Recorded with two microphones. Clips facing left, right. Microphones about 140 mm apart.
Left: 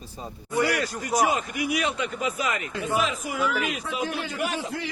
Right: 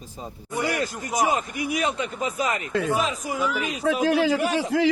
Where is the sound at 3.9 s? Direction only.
90° right.